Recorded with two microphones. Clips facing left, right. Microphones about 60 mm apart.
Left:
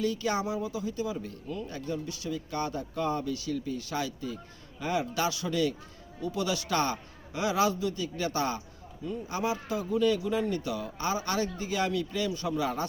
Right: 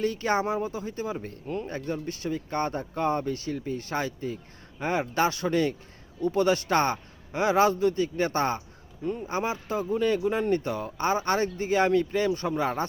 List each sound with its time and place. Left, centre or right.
0.0 s speech: right